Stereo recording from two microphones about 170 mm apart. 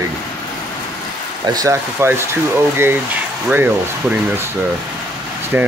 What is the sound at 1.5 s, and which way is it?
Speech, 20° right (ahead or behind).